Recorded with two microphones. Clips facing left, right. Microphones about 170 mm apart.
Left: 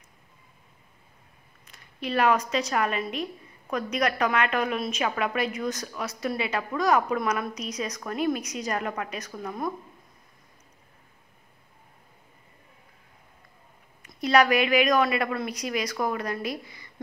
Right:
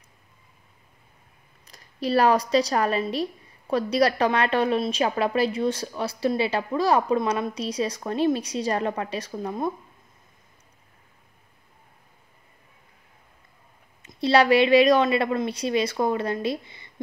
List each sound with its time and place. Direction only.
1.7 s a woman's voice: 35° right (ahead or behind)
14.0 s a woman's voice: 30° right (ahead or behind)